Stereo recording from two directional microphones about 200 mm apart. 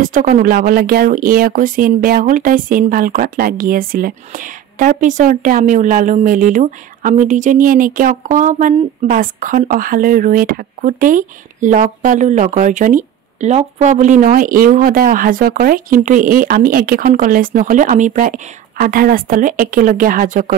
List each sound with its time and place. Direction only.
0.0 s speech: 40° right (ahead or behind)